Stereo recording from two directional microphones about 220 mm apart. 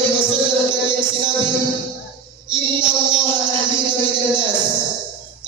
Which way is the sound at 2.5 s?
20° right (ahead or behind).